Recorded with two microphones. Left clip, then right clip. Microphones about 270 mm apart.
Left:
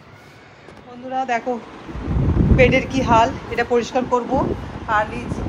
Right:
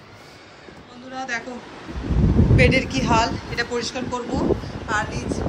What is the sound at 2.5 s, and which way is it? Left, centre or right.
Speech, centre.